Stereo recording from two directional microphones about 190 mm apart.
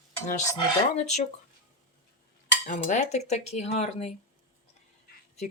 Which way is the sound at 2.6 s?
40° left (ahead or behind).